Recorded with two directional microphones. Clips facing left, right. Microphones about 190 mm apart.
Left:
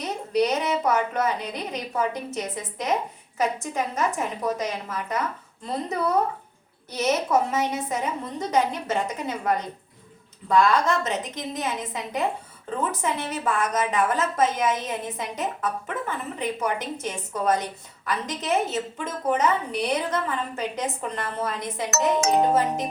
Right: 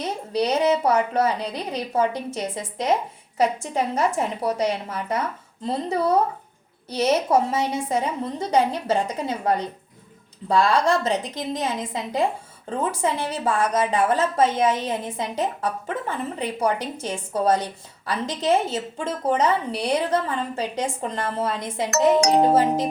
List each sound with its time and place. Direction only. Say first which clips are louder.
0.0 s a woman's voice: left 1 dB; 30° right (ahead or behind)